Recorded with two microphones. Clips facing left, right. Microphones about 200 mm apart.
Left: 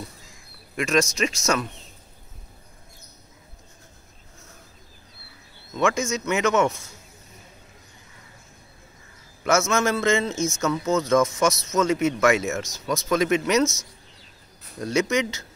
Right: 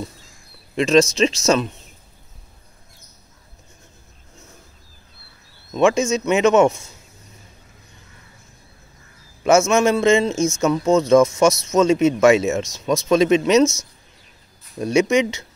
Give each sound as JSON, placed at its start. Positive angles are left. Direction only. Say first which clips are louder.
{"t": 0.7, "sound": "a man's voice", "louder": "right 7 dB", "side_deg": -25}
{"t": 5.7, "sound": "a man's voice", "louder": "right 7 dB", "side_deg": -20}
{"t": 9.4, "sound": "a man's voice", "louder": "right 7 dB", "side_deg": -15}
{"t": 14.8, "sound": "a man's voice", "louder": "right 6 dB", "side_deg": -20}